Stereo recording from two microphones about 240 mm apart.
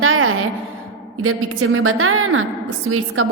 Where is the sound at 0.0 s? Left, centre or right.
Right.